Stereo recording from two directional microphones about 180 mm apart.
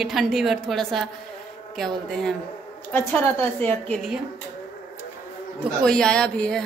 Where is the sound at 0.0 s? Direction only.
Centre (ahead or behind).